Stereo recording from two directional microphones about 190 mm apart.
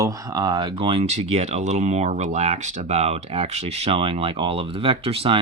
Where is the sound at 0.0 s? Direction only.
20° right (ahead or behind).